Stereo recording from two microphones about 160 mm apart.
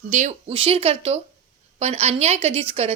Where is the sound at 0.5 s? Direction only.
35° right (ahead or behind).